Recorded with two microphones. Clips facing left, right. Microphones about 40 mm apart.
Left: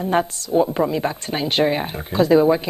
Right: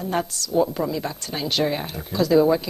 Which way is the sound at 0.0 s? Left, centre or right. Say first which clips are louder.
Left 5 dB; left.